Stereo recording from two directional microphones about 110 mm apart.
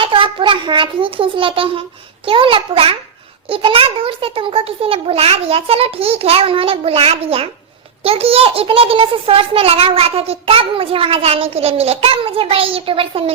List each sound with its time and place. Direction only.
0.0 s a child's voice: 55° right (ahead or behind)